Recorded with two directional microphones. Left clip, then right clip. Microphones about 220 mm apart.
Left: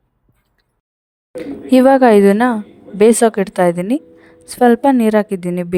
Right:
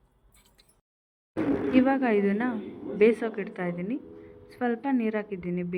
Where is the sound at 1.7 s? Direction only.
65° left (ahead or behind).